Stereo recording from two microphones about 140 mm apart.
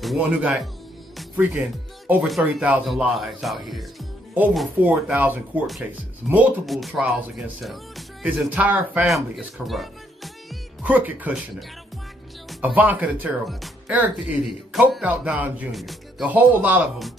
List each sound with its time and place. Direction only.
0.0 s speech: 5° right (ahead or behind)
6.6 s speech: centre (ahead or behind)
8.5 s speech: 10° right (ahead or behind)
10.9 s speech: 10° right (ahead or behind)
12.4 s speech: 10° right (ahead or behind)
13.5 s music: centre (ahead or behind)
13.9 s speech: 10° right (ahead or behind)
16.3 s speech: 15° right (ahead or behind)